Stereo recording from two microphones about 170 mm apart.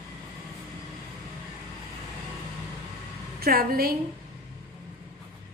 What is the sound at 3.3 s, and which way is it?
Speech, 60° right (ahead or behind).